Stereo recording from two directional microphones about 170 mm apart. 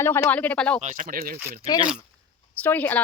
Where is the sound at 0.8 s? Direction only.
45° right (ahead or behind).